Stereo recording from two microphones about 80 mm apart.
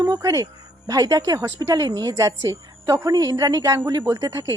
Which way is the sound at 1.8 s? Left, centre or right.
Right.